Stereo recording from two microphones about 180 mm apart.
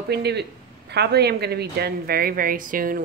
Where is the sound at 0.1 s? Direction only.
65° right (ahead or behind).